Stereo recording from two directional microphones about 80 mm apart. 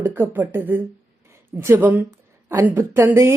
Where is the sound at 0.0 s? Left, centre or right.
Right.